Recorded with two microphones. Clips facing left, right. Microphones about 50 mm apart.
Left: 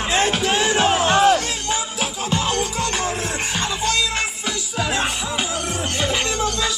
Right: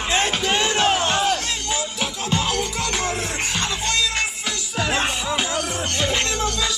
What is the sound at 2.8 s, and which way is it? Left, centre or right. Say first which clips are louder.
Music: left 1 dB; centre.